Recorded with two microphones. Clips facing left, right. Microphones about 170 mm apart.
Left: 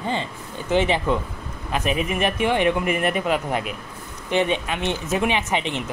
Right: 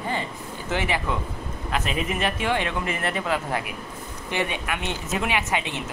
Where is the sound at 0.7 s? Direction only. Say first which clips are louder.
Left 6 dB; 20° left (ahead or behind).